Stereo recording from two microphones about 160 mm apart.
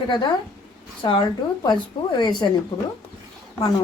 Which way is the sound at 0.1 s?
30° left (ahead or behind).